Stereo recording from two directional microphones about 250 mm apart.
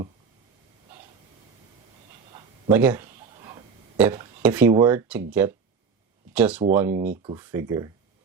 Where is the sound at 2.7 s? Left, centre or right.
Centre.